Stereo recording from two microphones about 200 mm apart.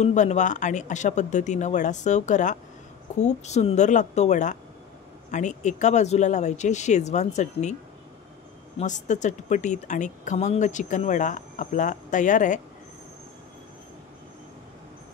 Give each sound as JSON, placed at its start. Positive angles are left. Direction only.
{"t": 0.0, "sound": "speech", "side_deg": 35}
{"t": 8.7, "sound": "speech", "side_deg": 35}